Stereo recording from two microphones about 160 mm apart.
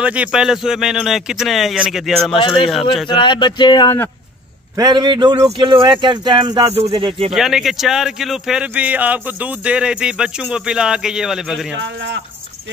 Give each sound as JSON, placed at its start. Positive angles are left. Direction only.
{"t": 0.0, "sound": "a man's voice", "side_deg": -5}
{"t": 2.3, "sound": "a man's voice", "side_deg": 35}
{"t": 4.7, "sound": "speech", "side_deg": -25}
{"t": 7.3, "sound": "a man's voice", "side_deg": 0}
{"t": 11.7, "sound": "speech", "side_deg": -90}